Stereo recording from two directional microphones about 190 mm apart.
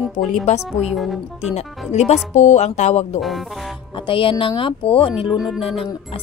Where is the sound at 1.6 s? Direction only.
35° left (ahead or behind).